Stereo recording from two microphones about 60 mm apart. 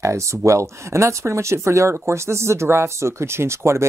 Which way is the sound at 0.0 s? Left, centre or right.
Right.